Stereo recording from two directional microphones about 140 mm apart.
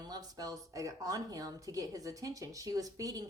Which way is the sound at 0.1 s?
25° right (ahead or behind).